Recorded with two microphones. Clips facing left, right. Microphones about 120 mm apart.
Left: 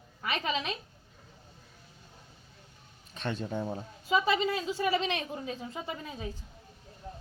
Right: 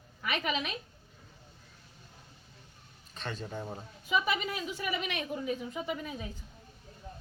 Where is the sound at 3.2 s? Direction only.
50° left (ahead or behind).